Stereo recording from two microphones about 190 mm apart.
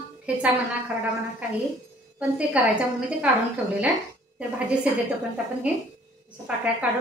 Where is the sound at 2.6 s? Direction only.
10° right (ahead or behind).